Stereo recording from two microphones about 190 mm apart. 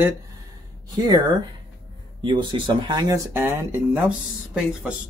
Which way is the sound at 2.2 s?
25° right (ahead or behind).